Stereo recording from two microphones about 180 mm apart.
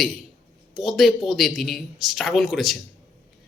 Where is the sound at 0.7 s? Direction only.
Centre (ahead or behind).